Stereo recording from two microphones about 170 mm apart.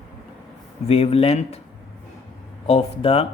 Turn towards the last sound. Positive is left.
turn(degrees=35)  # may be behind; listen again after turning